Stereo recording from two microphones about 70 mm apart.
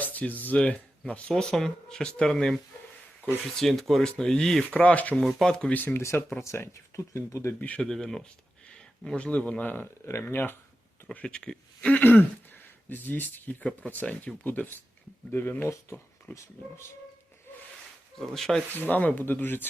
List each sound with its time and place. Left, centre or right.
0.0 s speech: left; by 2.6 s centre
3.6 s speech: centre
4.8 s speech: left
5.1 s speech: centre
5.7 s speech: left
6.0 s speech: left
7.8 s speech: centre; by 10.6 s left
11.1 s speech: centre
12.0 s speech: left
15.6 s speech: left
18.2 s speech: centre
18.9 s speech: left